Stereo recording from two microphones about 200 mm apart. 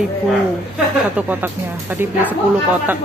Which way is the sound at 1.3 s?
10° right (ahead or behind).